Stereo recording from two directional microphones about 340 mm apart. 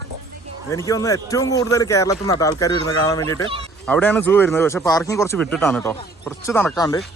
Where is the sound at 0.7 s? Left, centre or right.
Centre.